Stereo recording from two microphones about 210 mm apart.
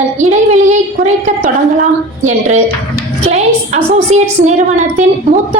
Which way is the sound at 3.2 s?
30° right (ahead or behind).